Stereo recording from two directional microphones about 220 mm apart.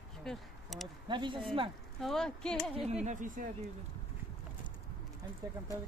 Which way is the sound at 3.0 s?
35° right (ahead or behind).